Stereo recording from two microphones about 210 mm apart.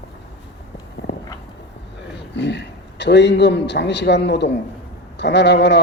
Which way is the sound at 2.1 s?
55° left (ahead or behind).